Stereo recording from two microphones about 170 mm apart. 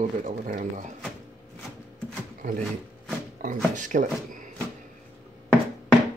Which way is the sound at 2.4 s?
45° right (ahead or behind).